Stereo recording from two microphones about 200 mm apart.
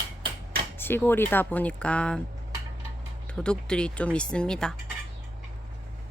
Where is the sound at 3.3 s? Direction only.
5° left (ahead or behind).